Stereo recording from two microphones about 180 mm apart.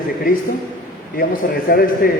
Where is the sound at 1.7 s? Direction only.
55° left (ahead or behind).